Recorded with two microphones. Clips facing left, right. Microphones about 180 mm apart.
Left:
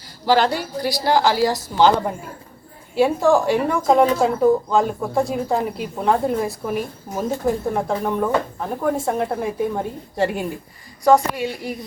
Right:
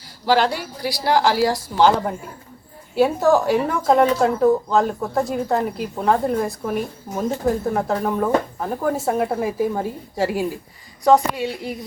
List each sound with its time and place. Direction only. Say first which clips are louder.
0.3 s a woman's voice: left 1 dB; 5° right (ahead or behind)
11.3 s speech: even; 20° right (ahead or behind)